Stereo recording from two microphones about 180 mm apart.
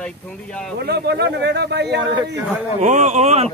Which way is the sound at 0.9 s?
65° right (ahead or behind).